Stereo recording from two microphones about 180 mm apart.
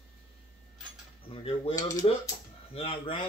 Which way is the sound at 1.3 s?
30° left (ahead or behind).